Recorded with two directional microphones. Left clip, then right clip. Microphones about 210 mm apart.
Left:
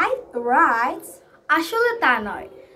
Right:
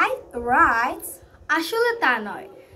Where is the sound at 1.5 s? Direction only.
15° left (ahead or behind).